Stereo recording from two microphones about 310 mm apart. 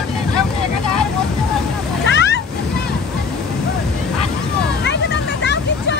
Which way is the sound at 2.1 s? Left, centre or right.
Left.